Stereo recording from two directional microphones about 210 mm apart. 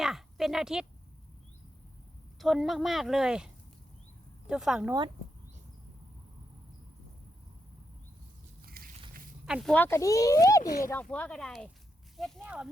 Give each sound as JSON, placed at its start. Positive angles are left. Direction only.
{"t": 0.0, "sound": "speech", "side_deg": 0}
{"t": 2.4, "sound": "speech", "side_deg": 0}
{"t": 4.9, "sound": "speech", "side_deg": -20}
{"t": 8.6, "sound": "a sound", "side_deg": -45}
{"t": 9.5, "sound": "speech", "side_deg": -5}
{"t": 9.7, "sound": "speech", "side_deg": 10}